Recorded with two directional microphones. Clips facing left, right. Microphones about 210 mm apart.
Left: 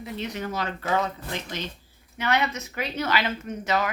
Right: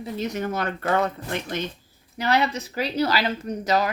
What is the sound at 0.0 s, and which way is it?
Speech, 45° right (ahead or behind).